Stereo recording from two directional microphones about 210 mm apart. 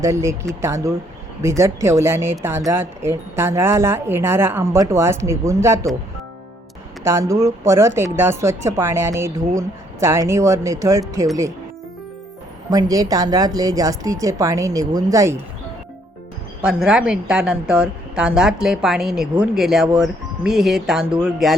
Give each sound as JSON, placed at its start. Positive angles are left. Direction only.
{"t": 0.0, "sound": "speech", "side_deg": -15}
{"t": 7.0, "sound": "speech", "side_deg": -15}
{"t": 12.7, "sound": "speech", "side_deg": -15}
{"t": 16.6, "sound": "a woman's voice", "side_deg": -5}